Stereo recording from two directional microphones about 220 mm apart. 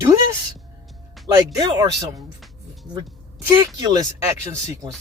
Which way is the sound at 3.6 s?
20° right (ahead or behind).